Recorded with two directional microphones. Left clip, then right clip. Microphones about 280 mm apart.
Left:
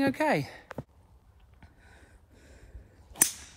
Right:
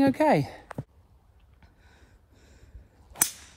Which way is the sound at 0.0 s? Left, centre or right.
Centre.